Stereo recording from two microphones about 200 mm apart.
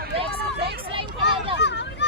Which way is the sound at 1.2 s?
60° left (ahead or behind).